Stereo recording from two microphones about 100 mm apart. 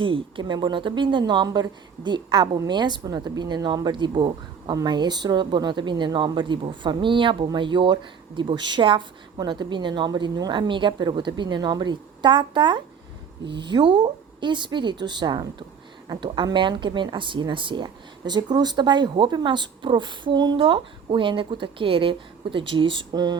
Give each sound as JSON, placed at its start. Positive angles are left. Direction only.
{"t": 0.0, "sound": "speech", "side_deg": -60}
{"t": 20.6, "sound": "a woman's voice", "side_deg": -60}
{"t": 23.1, "sound": "speech", "side_deg": -40}